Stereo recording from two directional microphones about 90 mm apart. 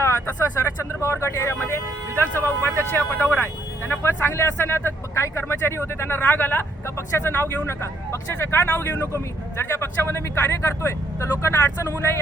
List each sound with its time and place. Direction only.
0.3 s speech: 30° left (ahead or behind)